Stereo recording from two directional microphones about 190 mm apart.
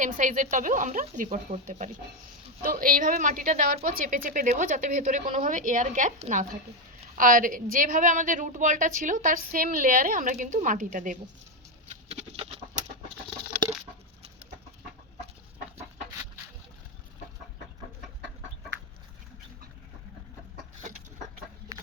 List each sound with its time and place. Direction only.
0.0 s a woman's voice: 45° right (ahead or behind)
12.0 s chicken: 35° right (ahead or behind)